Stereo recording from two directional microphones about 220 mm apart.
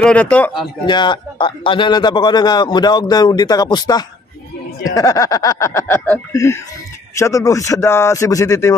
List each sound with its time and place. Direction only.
0.0 s speech: 5° left (ahead or behind)
0.8 s a man's voice: 20° left (ahead or behind)